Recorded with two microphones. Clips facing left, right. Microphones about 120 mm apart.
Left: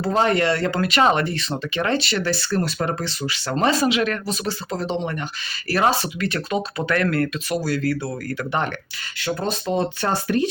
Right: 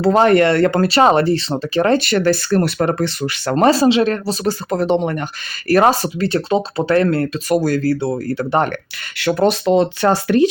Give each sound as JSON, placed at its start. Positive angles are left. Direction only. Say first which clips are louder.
{"t": 0.0, "sound": "speech", "louder": "right 7 dB", "side_deg": -60}
{"t": 0.8, "sound": "speech", "louder": "right 6 dB", "side_deg": -35}
{"t": 2.0, "sound": "speech", "louder": "right 8 dB", "side_deg": -50}
{"t": 3.7, "sound": "speech", "louder": "right 7 dB", "side_deg": -30}
{"t": 4.7, "sound": "speech", "louder": "right 9 dB", "side_deg": -55}
{"t": 7.5, "sound": "speech", "louder": "right 9 dB", "side_deg": -45}
{"t": 7.9, "sound": "speech", "louder": "right 7 dB", "side_deg": -25}
{"t": 9.1, "sound": "speech", "louder": "right 10 dB", "side_deg": -75}